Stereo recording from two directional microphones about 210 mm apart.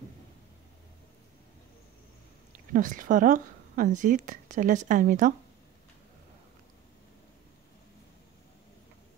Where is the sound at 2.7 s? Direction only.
40° right (ahead or behind).